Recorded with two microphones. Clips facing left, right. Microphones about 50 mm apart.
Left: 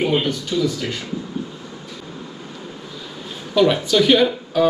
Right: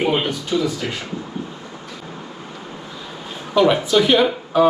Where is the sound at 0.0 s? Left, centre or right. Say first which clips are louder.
Even; right.